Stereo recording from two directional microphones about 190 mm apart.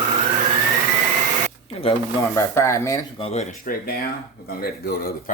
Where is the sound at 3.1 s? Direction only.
30° left (ahead or behind).